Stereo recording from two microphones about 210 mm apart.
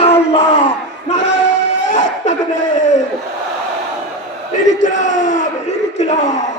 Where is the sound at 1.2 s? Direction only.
60° left (ahead or behind).